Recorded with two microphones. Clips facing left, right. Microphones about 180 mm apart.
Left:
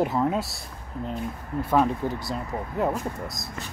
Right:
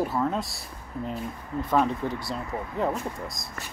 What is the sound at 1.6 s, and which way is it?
Speech, 10° left (ahead or behind).